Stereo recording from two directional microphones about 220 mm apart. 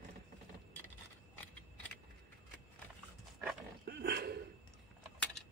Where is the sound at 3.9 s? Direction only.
45° right (ahead or behind).